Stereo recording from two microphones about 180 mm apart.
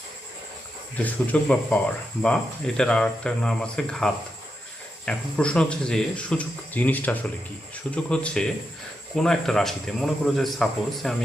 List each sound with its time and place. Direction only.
0.9 s a man's voice: 10° left (ahead or behind)